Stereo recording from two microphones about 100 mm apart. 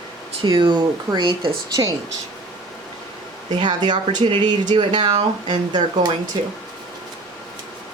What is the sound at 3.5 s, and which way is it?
Speech, 45° right (ahead or behind).